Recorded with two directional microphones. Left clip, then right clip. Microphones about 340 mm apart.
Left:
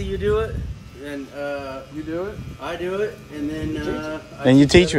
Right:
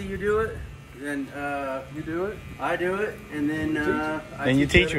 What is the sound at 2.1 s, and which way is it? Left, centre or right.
Speech, centre.